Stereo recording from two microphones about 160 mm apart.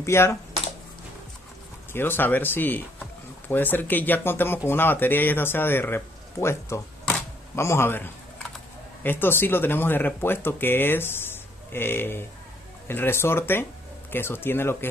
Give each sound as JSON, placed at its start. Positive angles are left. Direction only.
{"t": 0.0, "sound": "speech", "side_deg": 15}
{"t": 1.9, "sound": "speech", "side_deg": 15}